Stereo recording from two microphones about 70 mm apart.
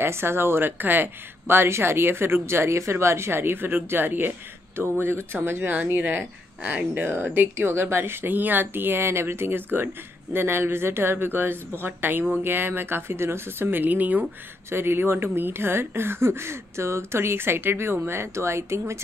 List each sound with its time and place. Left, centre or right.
0.0 s speech: right